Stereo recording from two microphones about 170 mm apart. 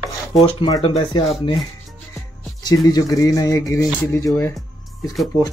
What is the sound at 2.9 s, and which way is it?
Speech, 20° left (ahead or behind).